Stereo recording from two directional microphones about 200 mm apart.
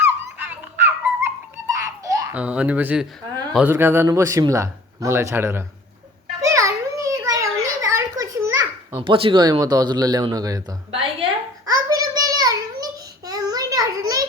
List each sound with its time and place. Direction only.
0.0 s a sound: 10° right (ahead or behind)
2.0 s babbling: 15° right (ahead or behind)
2.4 s speech: 5° right (ahead or behind)
6.4 s children playing: 15° right (ahead or behind)
9.0 s speech: 25° right (ahead or behind)
11.2 s a sound: 20° right (ahead or behind)